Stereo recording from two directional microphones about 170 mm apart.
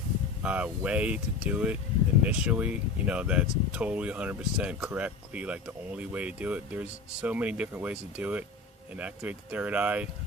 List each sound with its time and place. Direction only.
0.4 s speech: 10° right (ahead or behind)